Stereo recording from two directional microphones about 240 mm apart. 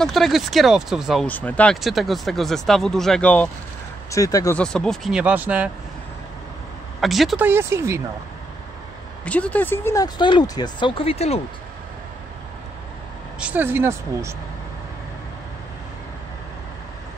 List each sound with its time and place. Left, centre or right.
0.0 s speech: centre
7.0 s speech: centre
9.2 s speech: centre; by 11.4 s left
13.4 s speech: centre